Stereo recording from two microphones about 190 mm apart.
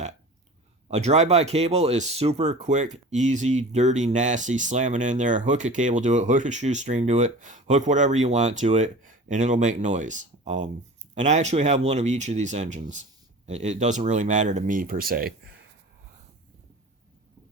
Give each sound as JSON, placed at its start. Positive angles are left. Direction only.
{"t": 0.9, "sound": "speech", "side_deg": -35}